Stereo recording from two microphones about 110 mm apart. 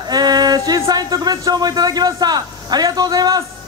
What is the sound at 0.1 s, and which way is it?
Speech, 40° right (ahead or behind).